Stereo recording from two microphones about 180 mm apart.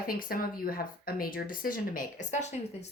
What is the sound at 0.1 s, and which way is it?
Speech, 55° left (ahead or behind).